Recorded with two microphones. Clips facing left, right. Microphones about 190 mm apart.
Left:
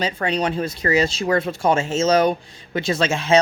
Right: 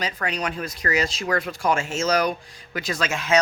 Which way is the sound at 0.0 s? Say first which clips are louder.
Left 6 dB; 25° left (ahead or behind).